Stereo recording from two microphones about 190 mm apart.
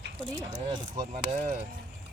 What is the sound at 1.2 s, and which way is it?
Speech, 45° right (ahead or behind).